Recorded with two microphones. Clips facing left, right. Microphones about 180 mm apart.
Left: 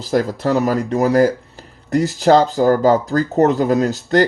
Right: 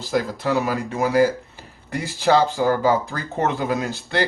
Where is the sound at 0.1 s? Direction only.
40° left (ahead or behind).